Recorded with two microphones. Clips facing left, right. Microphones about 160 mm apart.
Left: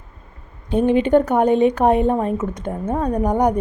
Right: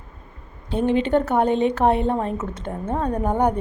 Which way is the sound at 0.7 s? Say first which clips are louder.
Left 4 dB; 15° left (ahead or behind).